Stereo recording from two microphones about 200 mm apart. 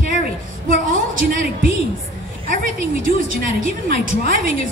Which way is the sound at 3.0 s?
45° right (ahead or behind).